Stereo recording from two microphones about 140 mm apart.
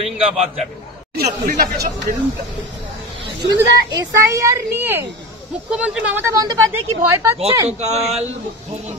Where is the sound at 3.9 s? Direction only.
20° right (ahead or behind).